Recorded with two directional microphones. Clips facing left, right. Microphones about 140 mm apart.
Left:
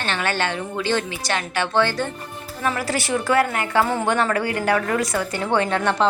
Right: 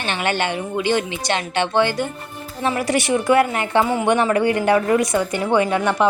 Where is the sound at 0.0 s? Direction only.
20° right (ahead or behind).